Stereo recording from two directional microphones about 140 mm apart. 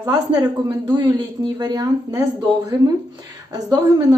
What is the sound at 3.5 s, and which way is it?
Speech, 25° right (ahead or behind).